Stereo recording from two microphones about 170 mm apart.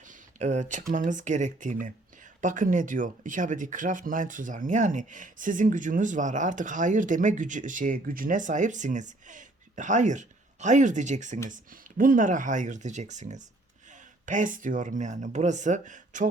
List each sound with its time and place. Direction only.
0.0 s speech: 45° right (ahead or behind)